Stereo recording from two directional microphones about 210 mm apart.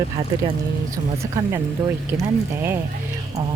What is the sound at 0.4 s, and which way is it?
Speech, 15° right (ahead or behind).